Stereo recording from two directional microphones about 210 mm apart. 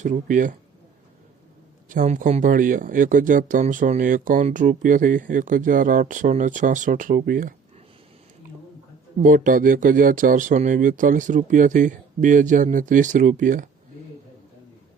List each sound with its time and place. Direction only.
0.0 s speech: 35° right (ahead or behind)
1.9 s speech: 40° right (ahead or behind)
9.1 s speech: 40° right (ahead or behind)